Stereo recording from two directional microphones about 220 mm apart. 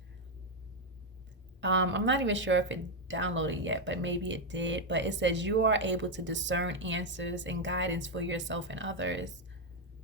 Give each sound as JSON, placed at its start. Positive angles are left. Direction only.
{"t": 1.6, "sound": "speech", "side_deg": -55}